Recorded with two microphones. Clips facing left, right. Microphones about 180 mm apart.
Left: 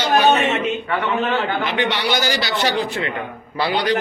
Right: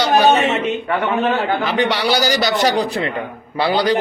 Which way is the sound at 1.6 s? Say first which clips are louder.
Right 3 dB; 35° right (ahead or behind).